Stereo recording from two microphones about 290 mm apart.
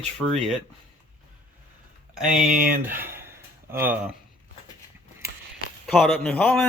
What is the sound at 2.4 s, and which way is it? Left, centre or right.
Speech, right.